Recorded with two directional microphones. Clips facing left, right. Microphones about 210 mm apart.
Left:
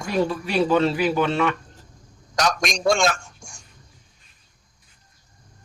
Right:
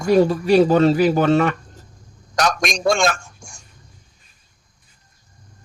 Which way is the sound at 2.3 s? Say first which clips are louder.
Right 2 dB; 55° right (ahead or behind).